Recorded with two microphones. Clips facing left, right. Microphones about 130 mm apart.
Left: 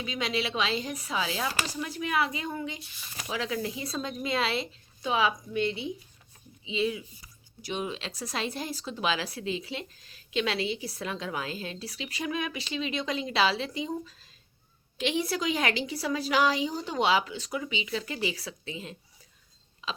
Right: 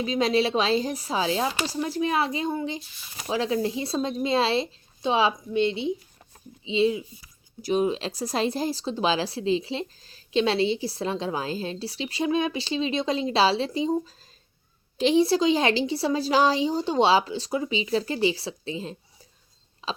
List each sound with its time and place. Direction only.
0.0 s speech: 35° right (ahead or behind)
7.6 s speech: 40° right (ahead or behind)
19.8 s a sound: 35° right (ahead or behind)